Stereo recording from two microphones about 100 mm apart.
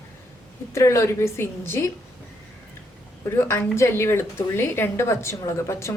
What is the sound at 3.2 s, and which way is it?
Speech, 25° left (ahead or behind).